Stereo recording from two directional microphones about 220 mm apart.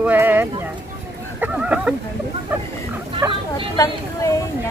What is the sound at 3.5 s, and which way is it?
Speech, 15° left (ahead or behind).